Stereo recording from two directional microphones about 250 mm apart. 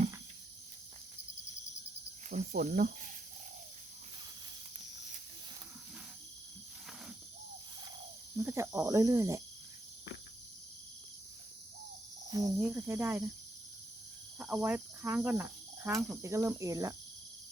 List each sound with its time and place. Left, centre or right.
2.3 s speech: right
8.4 s cricket: centre
12.3 s cricket: centre
14.3 s speech: centre
16.2 s cricket: centre